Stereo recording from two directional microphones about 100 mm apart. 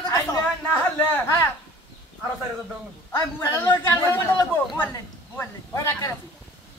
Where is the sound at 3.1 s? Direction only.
25° left (ahead or behind).